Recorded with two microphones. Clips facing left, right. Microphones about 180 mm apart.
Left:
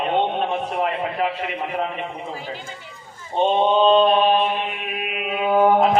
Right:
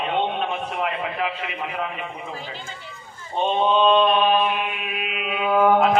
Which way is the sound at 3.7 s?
30° left (ahead or behind).